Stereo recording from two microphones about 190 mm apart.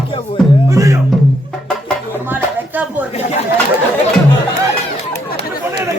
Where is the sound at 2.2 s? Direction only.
10° right (ahead or behind).